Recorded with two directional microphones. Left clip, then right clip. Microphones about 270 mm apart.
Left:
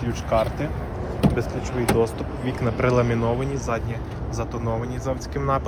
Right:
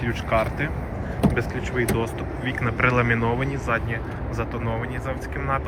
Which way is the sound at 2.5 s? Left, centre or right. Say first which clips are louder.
Right 1 dB; centre.